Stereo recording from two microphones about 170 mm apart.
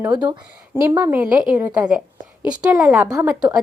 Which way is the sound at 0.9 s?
15° right (ahead or behind).